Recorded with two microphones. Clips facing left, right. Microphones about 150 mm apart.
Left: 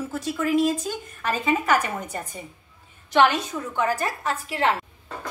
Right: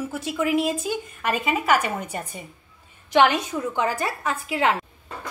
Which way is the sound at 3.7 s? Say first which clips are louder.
Left 2 dB; 20° right (ahead or behind).